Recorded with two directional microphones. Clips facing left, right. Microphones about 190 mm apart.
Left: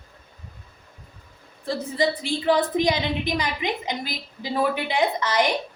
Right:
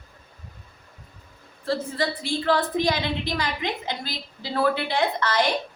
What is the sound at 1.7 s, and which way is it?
A woman's voice, 15° left (ahead or behind).